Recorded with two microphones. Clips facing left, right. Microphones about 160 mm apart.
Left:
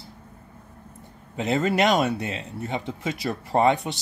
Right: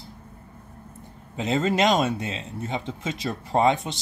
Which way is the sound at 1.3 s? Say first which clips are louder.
Left 1 dB; 20° right (ahead or behind).